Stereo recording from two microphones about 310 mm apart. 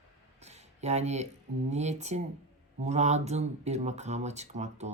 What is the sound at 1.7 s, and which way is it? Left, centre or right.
Speech, right.